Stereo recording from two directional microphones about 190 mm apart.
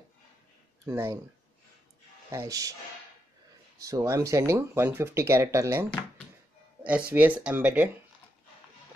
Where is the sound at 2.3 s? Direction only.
20° right (ahead or behind).